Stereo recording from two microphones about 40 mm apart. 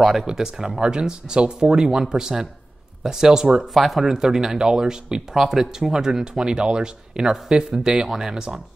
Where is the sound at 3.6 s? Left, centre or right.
Centre.